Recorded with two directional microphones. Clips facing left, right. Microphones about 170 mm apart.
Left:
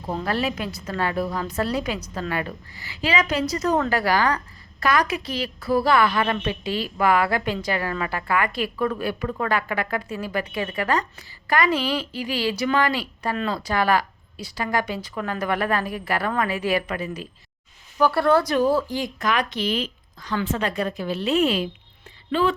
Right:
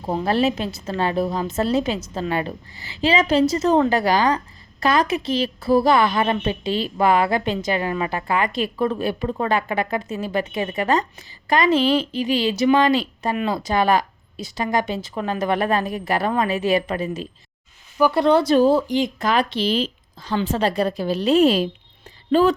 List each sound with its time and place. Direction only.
0.1 s a woman's voice: 25° right (ahead or behind); by 22.5 s 40° right (ahead or behind)